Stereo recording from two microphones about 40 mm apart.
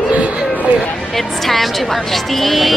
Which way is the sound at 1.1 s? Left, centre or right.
Centre.